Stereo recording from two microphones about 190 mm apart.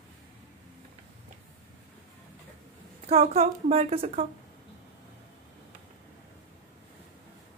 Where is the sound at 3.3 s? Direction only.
30° right (ahead or behind).